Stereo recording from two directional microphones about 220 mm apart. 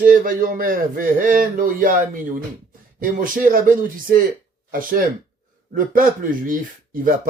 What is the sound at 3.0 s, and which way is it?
A man's voice, 40° right (ahead or behind).